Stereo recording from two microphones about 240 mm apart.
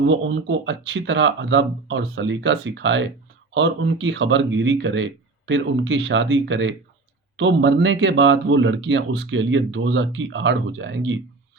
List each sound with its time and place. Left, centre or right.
0.0 s speech: right